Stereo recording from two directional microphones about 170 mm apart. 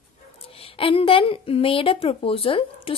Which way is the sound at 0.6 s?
30° left (ahead or behind).